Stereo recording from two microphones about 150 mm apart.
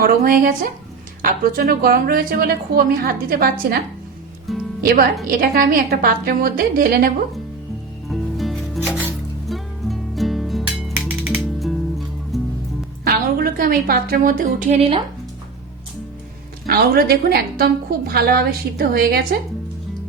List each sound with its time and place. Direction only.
0.0 s a woman's voice: 75° right (ahead or behind)
4.5 s speech: centre (ahead or behind)
5.4 s a woman's voice: 75° right (ahead or behind)
8.1 s music: centre (ahead or behind)
13.1 s a woman's voice: 75° right (ahead or behind)
14.8 s speech: 40° right (ahead or behind)
16.6 s a woman's voice: 90° right